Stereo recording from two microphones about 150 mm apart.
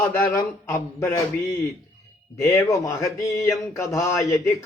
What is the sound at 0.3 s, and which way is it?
Speech, 25° left (ahead or behind).